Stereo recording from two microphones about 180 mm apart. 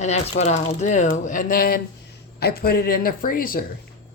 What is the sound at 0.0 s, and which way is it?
Speech, 40° left (ahead or behind).